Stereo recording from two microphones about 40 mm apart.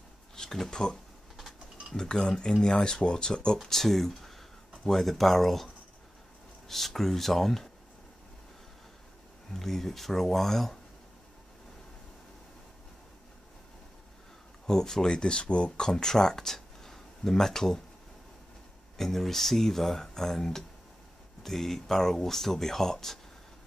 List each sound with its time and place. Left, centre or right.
0.4 s speech: centre
1.3 s a sound: centre
2.0 s speech: centre
3.6 s speech: centre
6.7 s speech: centre
9.5 s speech: centre
14.7 s speech: centre
18.9 s speech: centre